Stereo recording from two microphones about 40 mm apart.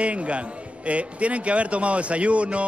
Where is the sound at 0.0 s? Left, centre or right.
Right.